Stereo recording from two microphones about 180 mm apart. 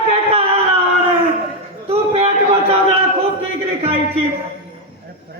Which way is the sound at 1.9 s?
35° right (ahead or behind).